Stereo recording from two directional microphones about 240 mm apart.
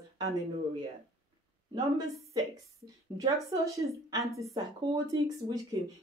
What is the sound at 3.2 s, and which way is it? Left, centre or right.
Speech, centre.